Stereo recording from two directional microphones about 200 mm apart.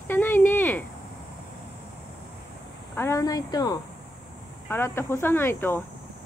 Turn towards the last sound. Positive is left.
turn(degrees=10)  # may be behind; listen again after turning